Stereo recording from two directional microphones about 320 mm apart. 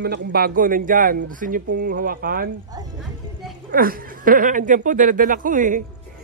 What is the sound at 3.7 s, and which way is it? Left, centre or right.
Speech, right.